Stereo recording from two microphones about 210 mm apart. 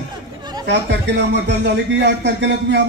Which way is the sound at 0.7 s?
55° right (ahead or behind).